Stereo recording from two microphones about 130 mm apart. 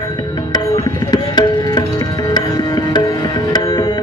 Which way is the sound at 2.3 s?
30° left (ahead or behind).